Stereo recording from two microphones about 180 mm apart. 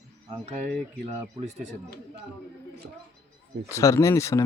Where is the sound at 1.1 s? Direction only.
35° right (ahead or behind).